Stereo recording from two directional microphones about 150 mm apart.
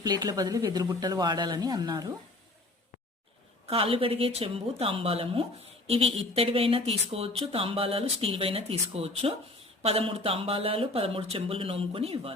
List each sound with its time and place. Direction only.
0.0 s speech: 25° right (ahead or behind)
3.7 s speech: 40° right (ahead or behind)